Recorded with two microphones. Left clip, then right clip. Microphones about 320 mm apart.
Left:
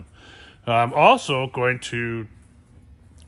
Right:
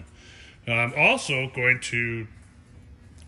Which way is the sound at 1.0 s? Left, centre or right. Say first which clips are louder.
Left 5 dB; centre.